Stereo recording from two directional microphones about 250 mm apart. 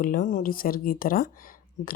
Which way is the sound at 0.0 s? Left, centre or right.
Left.